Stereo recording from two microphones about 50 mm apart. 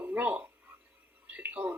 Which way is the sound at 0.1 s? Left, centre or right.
Right.